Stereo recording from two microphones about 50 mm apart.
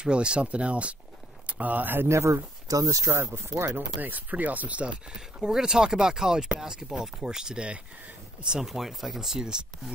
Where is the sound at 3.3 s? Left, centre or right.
Right.